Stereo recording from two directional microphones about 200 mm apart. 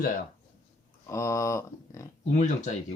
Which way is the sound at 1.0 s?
15° left (ahead or behind).